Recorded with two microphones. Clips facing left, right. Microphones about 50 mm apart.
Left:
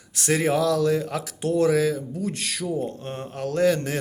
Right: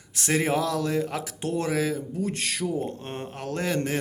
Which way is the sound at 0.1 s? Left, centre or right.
Centre.